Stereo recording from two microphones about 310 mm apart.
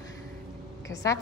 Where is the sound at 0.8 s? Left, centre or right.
Centre.